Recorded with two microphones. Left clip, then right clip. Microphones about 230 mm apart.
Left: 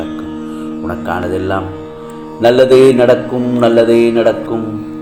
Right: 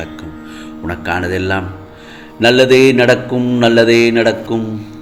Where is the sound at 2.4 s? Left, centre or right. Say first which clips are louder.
Left 2 dB; right.